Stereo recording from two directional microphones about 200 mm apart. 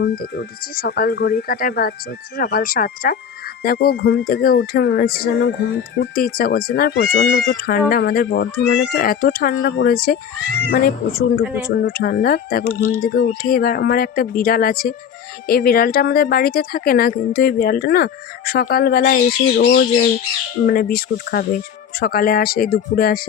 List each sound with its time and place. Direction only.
0.0 s speech: 55° left (ahead or behind)
11.7 s speech: 50° left (ahead or behind)
12.6 s speech: 15° right (ahead or behind)
13.0 s speech: 45° left (ahead or behind)